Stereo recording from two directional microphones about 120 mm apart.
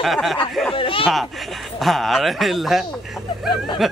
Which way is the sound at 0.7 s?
45° left (ahead or behind).